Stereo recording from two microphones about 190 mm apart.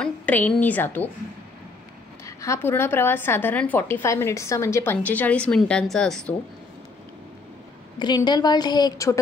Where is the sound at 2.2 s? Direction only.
15° left (ahead or behind).